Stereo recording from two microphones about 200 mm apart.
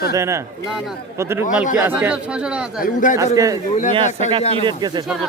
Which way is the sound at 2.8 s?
40° left (ahead or behind).